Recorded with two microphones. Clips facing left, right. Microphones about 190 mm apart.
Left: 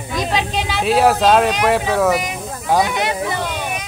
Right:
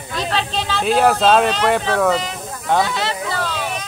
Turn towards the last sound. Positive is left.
turn(degrees=15)  # may be behind; listen again after turning